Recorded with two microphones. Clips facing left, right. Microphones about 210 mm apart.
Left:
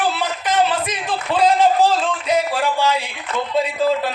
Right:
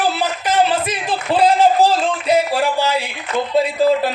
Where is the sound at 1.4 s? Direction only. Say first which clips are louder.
Right 1 dB; 10° right (ahead or behind).